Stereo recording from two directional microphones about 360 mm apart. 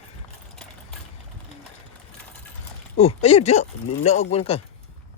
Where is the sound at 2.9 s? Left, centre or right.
Centre.